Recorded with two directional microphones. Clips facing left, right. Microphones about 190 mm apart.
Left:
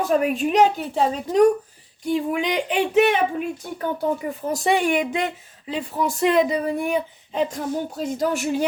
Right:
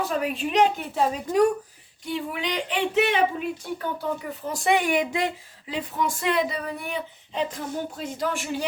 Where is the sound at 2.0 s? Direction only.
45° left (ahead or behind).